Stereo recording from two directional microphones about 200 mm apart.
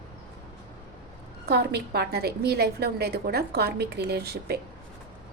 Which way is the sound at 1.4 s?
55° right (ahead or behind).